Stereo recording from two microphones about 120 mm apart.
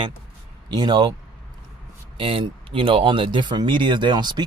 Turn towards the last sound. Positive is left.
turn(degrees=-35)  # may be behind; listen again after turning